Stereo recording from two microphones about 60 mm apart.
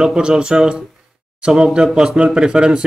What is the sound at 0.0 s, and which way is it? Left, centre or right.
Speech, centre.